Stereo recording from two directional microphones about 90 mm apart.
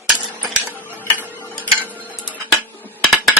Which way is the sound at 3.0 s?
Centre (ahead or behind).